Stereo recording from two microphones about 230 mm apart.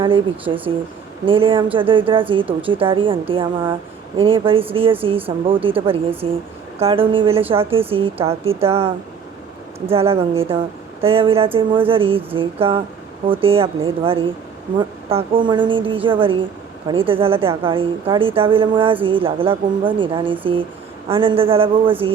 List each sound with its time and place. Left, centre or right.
0.0 s speech: right